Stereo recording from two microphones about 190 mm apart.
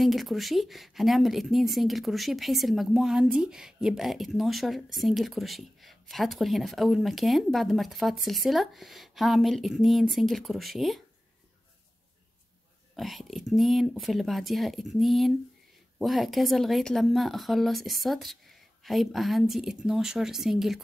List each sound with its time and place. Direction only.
0.0 s speech: centre (ahead or behind)
12.9 s speech: centre (ahead or behind)